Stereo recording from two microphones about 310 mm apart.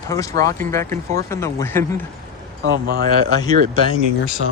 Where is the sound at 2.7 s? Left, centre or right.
Right.